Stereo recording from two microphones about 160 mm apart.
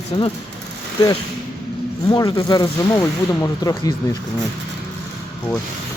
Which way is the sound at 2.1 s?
25° left (ahead or behind).